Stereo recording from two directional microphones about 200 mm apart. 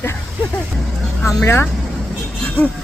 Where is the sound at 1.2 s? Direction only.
10° left (ahead or behind).